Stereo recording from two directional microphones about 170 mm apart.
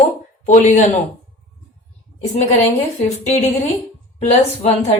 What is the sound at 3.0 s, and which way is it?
Speech, 40° left (ahead or behind).